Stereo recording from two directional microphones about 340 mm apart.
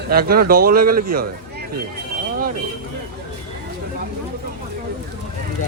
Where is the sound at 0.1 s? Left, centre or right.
Right.